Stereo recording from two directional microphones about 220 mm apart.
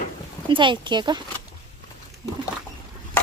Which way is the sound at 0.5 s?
20° right (ahead or behind).